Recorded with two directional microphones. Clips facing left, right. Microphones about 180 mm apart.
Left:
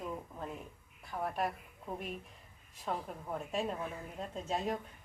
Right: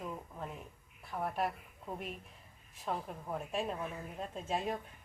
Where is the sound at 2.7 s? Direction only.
Centre (ahead or behind).